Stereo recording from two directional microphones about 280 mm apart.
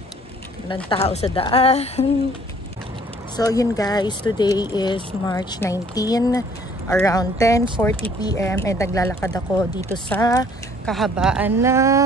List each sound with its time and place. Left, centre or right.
0.8 s a woman's voice: left
3.3 s speech: centre
10.9 s a woman's voice: centre